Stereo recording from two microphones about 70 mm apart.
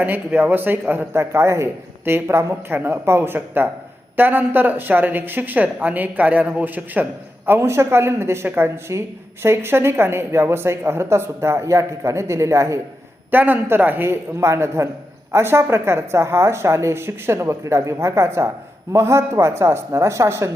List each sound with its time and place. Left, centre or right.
0.0 s speech: right
13.3 s speech: right